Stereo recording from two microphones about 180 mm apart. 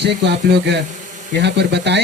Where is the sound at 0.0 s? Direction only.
70° right (ahead or behind).